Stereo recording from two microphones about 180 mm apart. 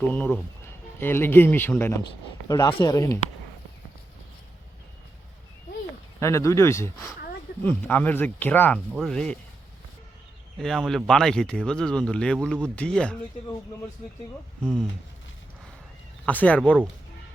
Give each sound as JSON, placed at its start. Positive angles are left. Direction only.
{"t": 0.0, "sound": "speech", "side_deg": 10}
{"t": 6.1, "sound": "speech", "side_deg": 15}
{"t": 10.6, "sound": "speech", "side_deg": 0}
{"t": 14.6, "sound": "speech", "side_deg": 5}
{"t": 16.2, "sound": "speech", "side_deg": 10}